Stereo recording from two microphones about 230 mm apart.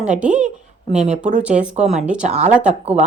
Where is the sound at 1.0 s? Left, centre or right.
Right.